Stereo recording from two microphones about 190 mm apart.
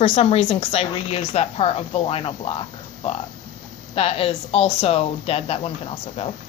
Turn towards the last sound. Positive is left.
turn(degrees=30)  # may be behind; listen again after turning